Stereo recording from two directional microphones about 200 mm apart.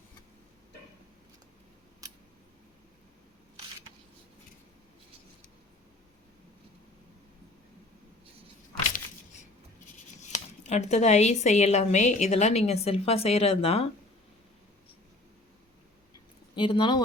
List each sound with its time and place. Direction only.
10.3 s speech: 35° left (ahead or behind)
16.6 s speech: 25° left (ahead or behind)